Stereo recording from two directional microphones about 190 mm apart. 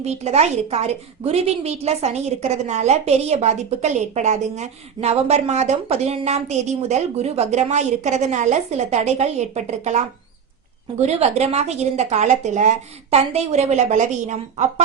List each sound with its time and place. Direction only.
0.0 s a woman's voice: 35° right (ahead or behind)